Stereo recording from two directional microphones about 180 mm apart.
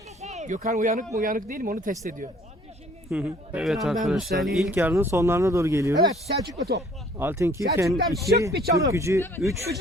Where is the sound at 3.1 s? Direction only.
5° right (ahead or behind).